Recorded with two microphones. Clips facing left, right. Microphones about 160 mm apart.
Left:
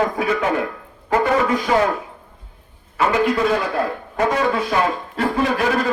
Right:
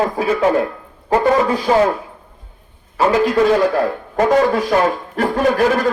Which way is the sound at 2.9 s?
35° right (ahead or behind).